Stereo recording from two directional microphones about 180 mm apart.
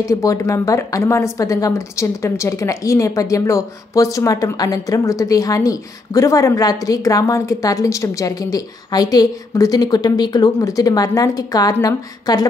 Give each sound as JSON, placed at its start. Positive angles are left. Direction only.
{"t": 0.0, "sound": "a woman's voice", "side_deg": 20}